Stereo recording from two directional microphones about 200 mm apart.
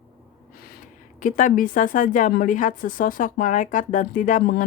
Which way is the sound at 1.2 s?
40° left (ahead or behind).